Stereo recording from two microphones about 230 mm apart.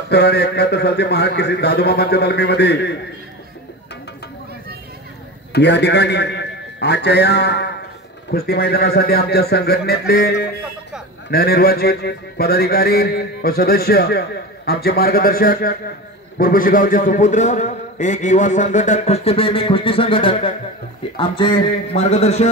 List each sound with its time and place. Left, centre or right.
0.1 s mantra: left
5.5 s a man's voice: left
8.3 s mantra: left
14.7 s a man's voice: left